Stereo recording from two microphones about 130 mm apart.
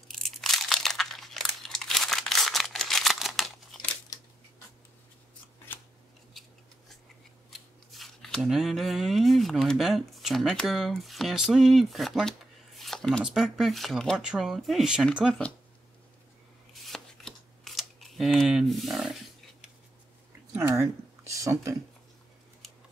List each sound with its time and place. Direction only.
0.1 s crumpling: centre (ahead or behind)
7.5 s speech: centre (ahead or behind)
16.7 s shuffling cards: centre (ahead or behind)
20.6 s squish: 20° right (ahead or behind)
21.4 s a sound: 25° right (ahead or behind)